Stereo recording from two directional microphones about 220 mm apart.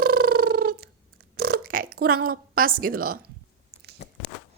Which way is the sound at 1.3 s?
45° right (ahead or behind).